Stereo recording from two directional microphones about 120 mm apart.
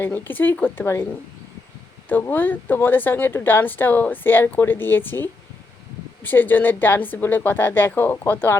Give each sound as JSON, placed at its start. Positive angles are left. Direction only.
{"t": 0.0, "sound": "speech", "side_deg": 15}
{"t": 2.0, "sound": "speech", "side_deg": 15}